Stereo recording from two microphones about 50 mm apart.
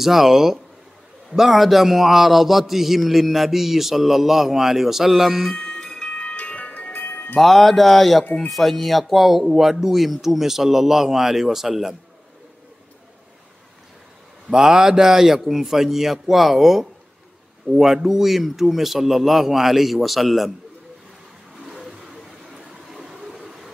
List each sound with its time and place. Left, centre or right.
0.0 s a man's voice: centre
5.6 s music: centre
6.9 s music: left
7.3 s a man's voice: centre
14.5 s a man's voice: centre
21.6 s vehicle: centre